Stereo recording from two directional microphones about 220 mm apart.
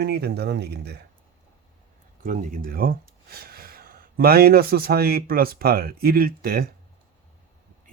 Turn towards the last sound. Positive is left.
turn(degrees=-45)  # may be behind; listen again after turning